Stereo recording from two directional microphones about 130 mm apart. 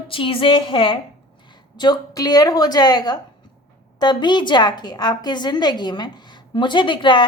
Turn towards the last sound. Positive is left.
turn(degrees=40)  # may be behind; listen again after turning